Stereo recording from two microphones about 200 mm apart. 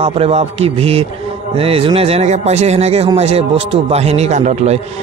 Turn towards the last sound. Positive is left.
turn(degrees=-35)  # may be behind; listen again after turning